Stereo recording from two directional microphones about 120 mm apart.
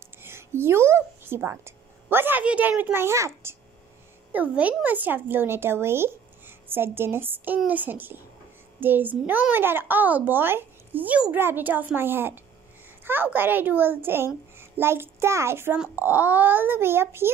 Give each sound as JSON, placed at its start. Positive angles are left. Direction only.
{"t": 0.2, "sound": "a woman's voice", "side_deg": -20}